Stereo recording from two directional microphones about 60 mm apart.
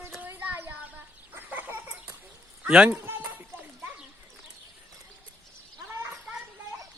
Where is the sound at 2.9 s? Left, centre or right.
Right.